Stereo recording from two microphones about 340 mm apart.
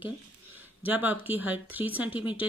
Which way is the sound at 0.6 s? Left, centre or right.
Centre.